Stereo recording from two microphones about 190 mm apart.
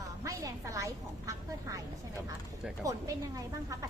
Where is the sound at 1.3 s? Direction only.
15° right (ahead or behind).